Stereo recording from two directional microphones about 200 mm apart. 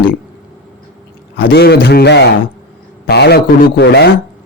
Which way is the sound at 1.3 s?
50° left (ahead or behind).